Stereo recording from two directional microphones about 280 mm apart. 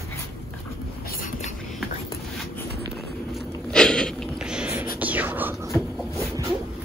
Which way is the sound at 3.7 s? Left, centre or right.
Centre.